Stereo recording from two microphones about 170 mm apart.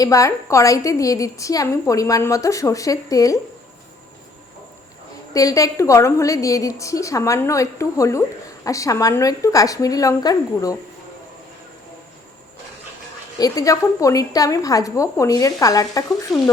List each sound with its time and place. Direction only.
0.0 s a woman's voice: 20° left (ahead or behind)
5.3 s a woman's voice: 20° left (ahead or behind)
13.4 s a woman's voice: 20° left (ahead or behind)
16.3 s frying: centre (ahead or behind)